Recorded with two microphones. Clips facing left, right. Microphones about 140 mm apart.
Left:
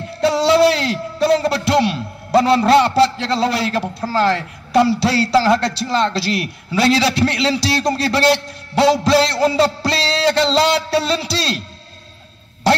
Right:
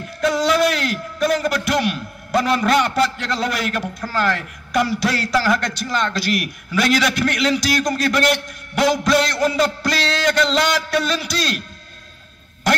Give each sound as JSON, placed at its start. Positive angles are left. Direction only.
{"t": 0.0, "sound": "speech", "side_deg": 30}
{"t": 12.7, "sound": "quack", "side_deg": 30}